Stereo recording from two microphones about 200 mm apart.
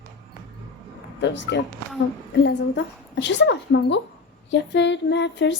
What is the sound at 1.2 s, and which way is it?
A woman's voice, 60° left (ahead or behind).